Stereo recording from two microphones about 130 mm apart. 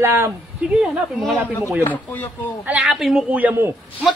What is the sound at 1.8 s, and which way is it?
Speech, 15° left (ahead or behind).